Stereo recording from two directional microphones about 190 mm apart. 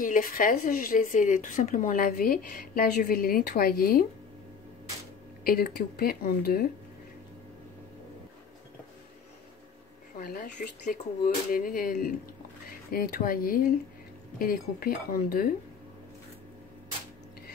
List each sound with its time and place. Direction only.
0.0 s speech: 45° left (ahead or behind)
5.4 s speech: 50° left (ahead or behind)
10.1 s speech: 50° left (ahead or behind)